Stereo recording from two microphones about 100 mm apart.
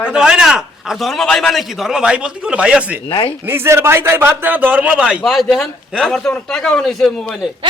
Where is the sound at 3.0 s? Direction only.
65° left (ahead or behind).